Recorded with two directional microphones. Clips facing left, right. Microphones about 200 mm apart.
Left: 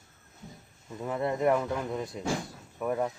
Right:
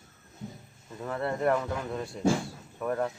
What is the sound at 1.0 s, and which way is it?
Speech, 15° left (ahead or behind).